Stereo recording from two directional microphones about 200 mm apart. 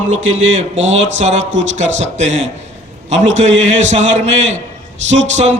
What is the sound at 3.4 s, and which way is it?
A man's voice, 35° right (ahead or behind).